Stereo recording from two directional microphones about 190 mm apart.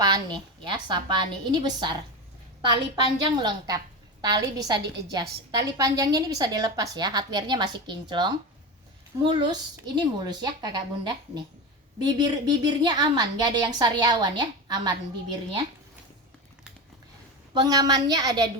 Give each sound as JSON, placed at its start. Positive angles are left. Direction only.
{"t": 0.0, "sound": "a woman's voice", "side_deg": -20}
{"t": 17.5, "sound": "a woman's voice", "side_deg": -20}